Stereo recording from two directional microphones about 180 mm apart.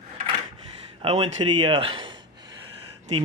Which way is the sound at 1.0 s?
30° right (ahead or behind).